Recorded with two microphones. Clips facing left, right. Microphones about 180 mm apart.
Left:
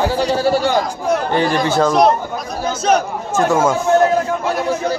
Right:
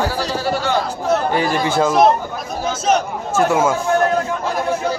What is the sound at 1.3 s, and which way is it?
A man's voice, 10° right (ahead or behind).